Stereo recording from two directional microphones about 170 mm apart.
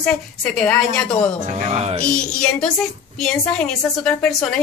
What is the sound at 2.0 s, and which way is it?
A woman's voice, 5° left (ahead or behind).